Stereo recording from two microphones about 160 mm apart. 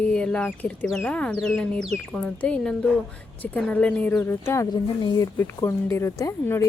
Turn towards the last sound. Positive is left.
turn(degrees=20)  # may be behind; listen again after turning